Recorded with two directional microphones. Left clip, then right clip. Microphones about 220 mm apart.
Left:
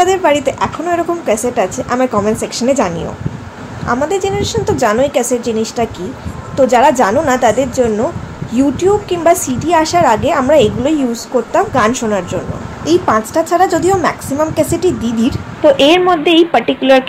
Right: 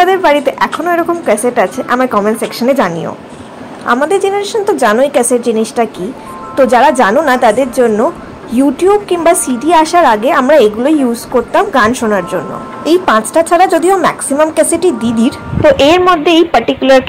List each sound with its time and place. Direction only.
0.0 s a woman's voice: 10° right (ahead or behind)
3.8 s a woman's voice: 20° right (ahead or behind)
15.6 s a woman's voice: 10° right (ahead or behind)